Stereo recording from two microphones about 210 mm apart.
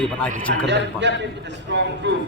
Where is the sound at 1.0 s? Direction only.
55° right (ahead or behind).